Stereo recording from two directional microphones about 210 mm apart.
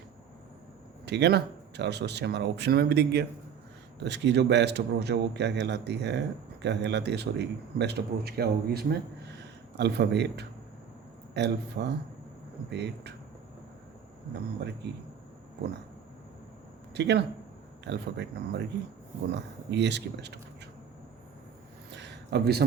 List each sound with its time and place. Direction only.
1.0 s a man's voice: 55° right (ahead or behind)
16.9 s a man's voice: 55° right (ahead or behind)
21.9 s a sound: 55° right (ahead or behind)